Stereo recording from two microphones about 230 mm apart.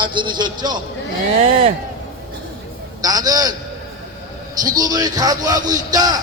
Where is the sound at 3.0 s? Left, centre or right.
Centre.